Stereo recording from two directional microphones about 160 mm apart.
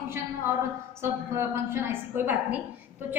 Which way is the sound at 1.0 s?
15° right (ahead or behind).